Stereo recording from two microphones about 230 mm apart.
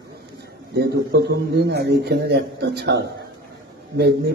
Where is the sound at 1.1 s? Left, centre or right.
Right.